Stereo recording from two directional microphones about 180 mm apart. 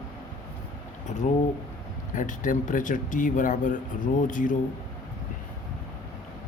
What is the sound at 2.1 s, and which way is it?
Speech, 45° left (ahead or behind).